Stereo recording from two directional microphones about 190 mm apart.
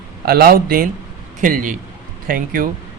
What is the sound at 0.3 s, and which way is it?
A man's voice, 55° right (ahead or behind).